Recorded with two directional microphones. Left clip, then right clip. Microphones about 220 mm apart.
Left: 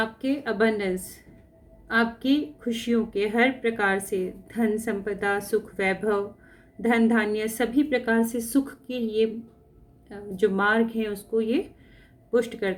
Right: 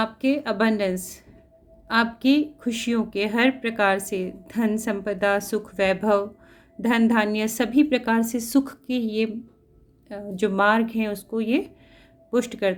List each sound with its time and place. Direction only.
0.0 s speech: 45° right (ahead or behind)